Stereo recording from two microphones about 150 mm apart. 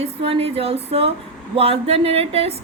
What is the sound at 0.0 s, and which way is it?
A woman's voice, 40° right (ahead or behind).